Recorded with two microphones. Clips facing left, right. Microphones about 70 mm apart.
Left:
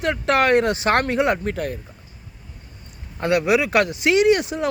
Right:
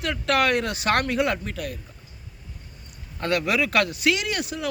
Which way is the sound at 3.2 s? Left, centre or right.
Centre.